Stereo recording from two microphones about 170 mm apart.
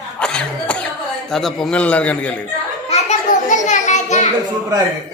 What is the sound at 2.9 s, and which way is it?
Children playing, 45° left (ahead or behind).